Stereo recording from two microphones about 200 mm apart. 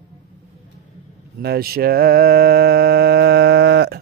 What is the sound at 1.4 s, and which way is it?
Mantra, 50° right (ahead or behind).